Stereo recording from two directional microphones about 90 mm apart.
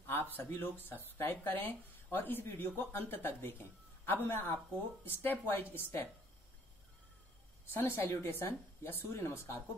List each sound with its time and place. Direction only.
0.0 s speech: 25° left (ahead or behind)
7.7 s speech: 25° left (ahead or behind)